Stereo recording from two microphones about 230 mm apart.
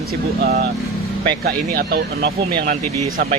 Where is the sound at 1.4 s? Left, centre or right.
Right.